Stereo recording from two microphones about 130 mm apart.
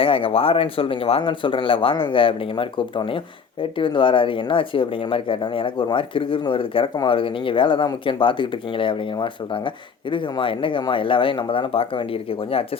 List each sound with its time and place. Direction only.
0.0 s speech: 45° left (ahead or behind)